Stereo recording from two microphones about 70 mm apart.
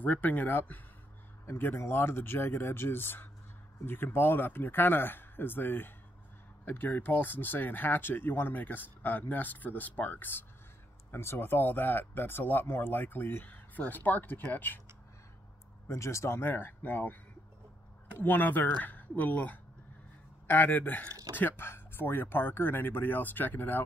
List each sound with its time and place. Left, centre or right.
0.0 s speech: left
15.9 s speech: left